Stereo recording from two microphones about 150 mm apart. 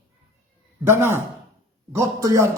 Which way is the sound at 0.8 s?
15° right (ahead or behind).